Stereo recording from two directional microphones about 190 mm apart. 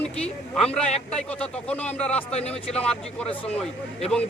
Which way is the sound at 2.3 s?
35° left (ahead or behind).